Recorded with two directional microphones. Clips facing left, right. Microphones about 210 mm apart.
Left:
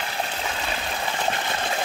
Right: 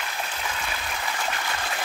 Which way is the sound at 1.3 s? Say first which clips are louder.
Left 4 dB; 30° left (ahead or behind).